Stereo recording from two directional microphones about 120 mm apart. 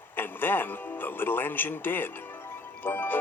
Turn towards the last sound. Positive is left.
turn(degrees=15)  # may be behind; listen again after turning